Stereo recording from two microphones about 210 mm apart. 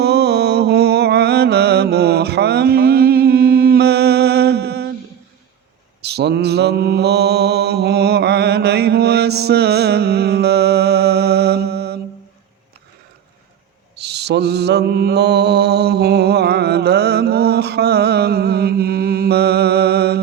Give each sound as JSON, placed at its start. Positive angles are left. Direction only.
{"t": 0.0, "sound": "mantra", "side_deg": -50}
{"t": 6.0, "sound": "mantra", "side_deg": -50}
{"t": 13.9, "sound": "mantra", "side_deg": -50}